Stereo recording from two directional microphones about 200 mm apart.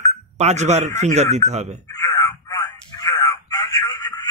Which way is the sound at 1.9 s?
15° left (ahead or behind).